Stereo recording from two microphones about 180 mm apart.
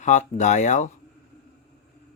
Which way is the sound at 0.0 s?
45° left (ahead or behind).